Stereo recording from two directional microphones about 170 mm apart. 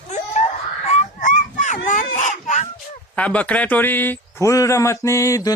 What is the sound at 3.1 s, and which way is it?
Speech, 10° left (ahead or behind).